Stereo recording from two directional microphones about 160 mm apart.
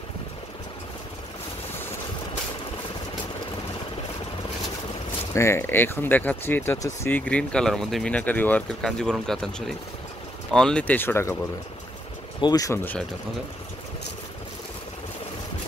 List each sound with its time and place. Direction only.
5.3 s speech: 15° left (ahead or behind)
12.4 s speech: 25° left (ahead or behind)